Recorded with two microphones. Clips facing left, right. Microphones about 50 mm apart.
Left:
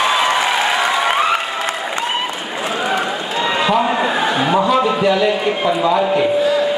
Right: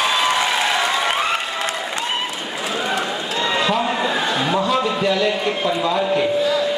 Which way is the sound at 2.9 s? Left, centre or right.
Centre.